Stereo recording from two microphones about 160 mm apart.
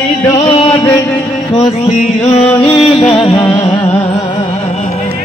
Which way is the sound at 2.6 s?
35° left (ahead or behind).